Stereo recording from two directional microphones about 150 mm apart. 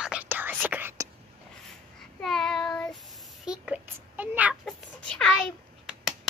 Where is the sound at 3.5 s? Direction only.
10° right (ahead or behind).